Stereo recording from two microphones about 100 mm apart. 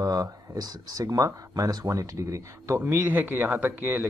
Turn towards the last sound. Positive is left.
turn(degrees=-15)  # may be behind; listen again after turning